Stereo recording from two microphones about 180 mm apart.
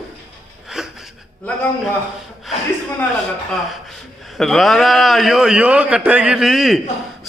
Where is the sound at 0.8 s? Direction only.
Centre (ahead or behind).